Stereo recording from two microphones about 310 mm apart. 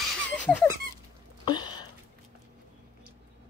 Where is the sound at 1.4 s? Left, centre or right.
Centre.